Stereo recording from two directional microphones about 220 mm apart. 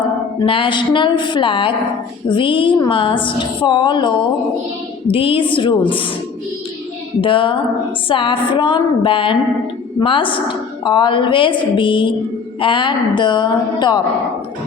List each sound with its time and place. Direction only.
0.3 s a woman's voice: 25° left (ahead or behind)
5.1 s a woman's voice: 25° left (ahead or behind)
7.2 s a woman's voice: 25° left (ahead or behind)